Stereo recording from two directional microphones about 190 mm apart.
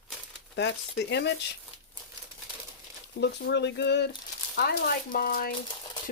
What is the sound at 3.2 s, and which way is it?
Speech, 65° left (ahead or behind).